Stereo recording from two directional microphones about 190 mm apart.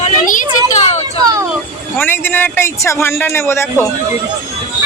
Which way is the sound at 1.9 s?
10° left (ahead or behind).